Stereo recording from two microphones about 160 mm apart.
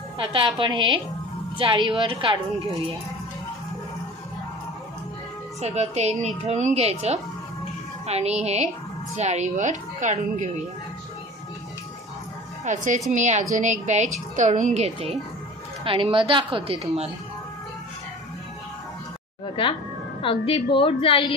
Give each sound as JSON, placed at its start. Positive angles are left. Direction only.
{"t": 0.2, "sound": "a woman's voice", "side_deg": -35}
{"t": 5.6, "sound": "a woman's voice", "side_deg": -45}
{"t": 12.6, "sound": "a woman's voice", "side_deg": -50}
{"t": 19.4, "sound": "a woman's voice", "side_deg": 35}